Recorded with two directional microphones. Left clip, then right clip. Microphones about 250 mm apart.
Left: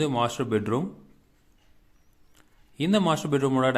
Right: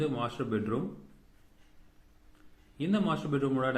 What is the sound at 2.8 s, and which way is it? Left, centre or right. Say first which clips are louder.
A man's voice: left 8 dB; left.